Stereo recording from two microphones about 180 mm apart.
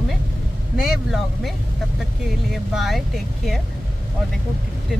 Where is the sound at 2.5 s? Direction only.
Centre (ahead or behind).